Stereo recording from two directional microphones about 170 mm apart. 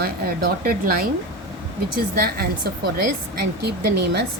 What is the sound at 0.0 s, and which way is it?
Speech, 65° right (ahead or behind).